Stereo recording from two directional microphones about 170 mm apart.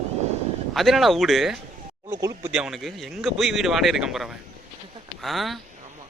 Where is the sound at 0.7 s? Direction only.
Centre (ahead or behind).